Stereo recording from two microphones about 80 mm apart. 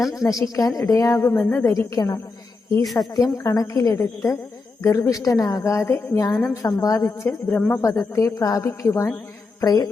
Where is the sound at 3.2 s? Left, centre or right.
Left.